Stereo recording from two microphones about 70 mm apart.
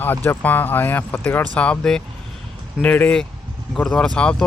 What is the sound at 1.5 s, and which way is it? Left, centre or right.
Speech, centre.